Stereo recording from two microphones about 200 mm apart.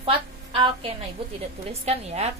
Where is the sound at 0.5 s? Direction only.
25° right (ahead or behind).